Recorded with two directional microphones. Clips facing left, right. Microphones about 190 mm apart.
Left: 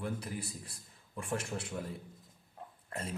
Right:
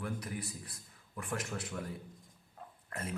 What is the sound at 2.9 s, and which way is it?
Speech, 30° left (ahead or behind).